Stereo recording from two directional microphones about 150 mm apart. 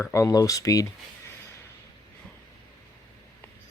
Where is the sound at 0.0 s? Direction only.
20° left (ahead or behind).